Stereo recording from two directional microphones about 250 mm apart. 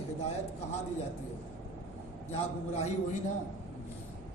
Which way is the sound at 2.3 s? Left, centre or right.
Left.